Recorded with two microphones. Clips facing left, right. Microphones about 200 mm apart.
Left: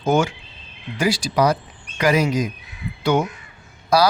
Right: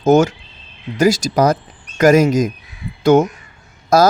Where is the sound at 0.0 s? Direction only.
40° right (ahead or behind).